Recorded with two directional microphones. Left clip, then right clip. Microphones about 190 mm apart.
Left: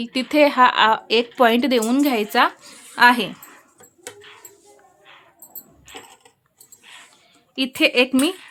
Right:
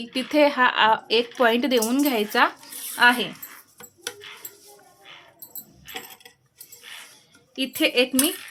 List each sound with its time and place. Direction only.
0.0 s speech: 25° left (ahead or behind)
7.5 s speech: 30° left (ahead or behind)